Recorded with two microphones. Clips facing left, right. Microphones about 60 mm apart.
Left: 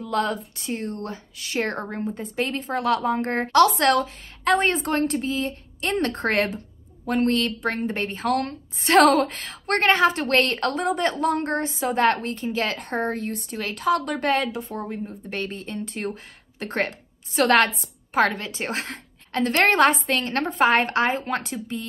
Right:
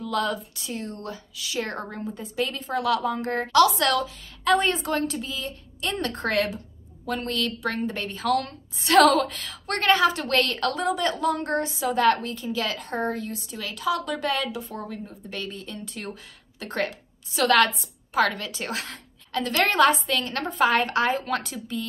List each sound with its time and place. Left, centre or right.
0.0 s a woman's voice: left
15.2 s a woman's voice: left